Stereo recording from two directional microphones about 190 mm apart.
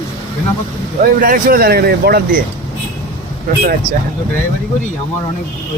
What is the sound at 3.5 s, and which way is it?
Speech, 45° right (ahead or behind).